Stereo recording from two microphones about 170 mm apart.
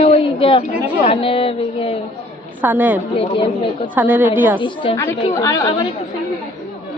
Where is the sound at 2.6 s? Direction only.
10° right (ahead or behind).